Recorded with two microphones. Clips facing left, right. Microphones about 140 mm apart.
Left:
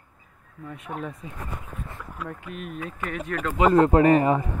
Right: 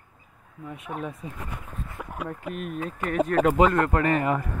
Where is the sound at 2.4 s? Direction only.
45° right (ahead or behind).